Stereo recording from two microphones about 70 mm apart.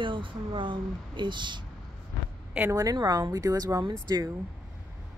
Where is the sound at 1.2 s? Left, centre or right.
Right.